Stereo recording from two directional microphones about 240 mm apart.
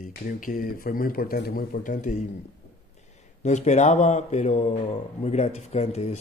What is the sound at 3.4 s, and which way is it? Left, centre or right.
Speech, left.